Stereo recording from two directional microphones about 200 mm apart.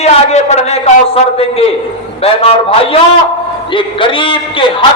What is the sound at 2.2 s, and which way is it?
A man's voice, 30° left (ahead or behind).